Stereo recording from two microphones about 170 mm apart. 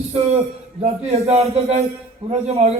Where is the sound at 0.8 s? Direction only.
40° right (ahead or behind).